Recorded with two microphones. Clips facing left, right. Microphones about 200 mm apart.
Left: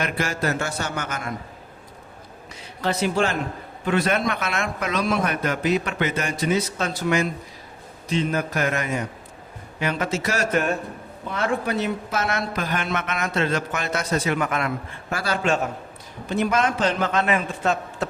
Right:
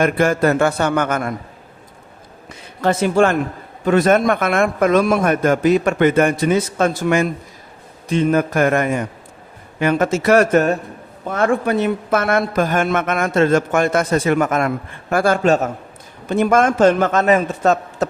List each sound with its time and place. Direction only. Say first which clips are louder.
0.0 s a man's voice: right 10 dB; 55° right (ahead or behind)
2.8 s a man's voice: right 7 dB; 50° right (ahead or behind)